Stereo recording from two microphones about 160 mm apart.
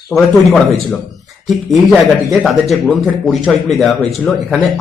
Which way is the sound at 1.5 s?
Centre (ahead or behind).